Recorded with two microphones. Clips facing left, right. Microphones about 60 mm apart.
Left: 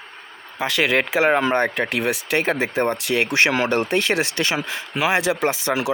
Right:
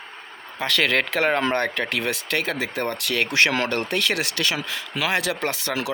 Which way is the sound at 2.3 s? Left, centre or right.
Left.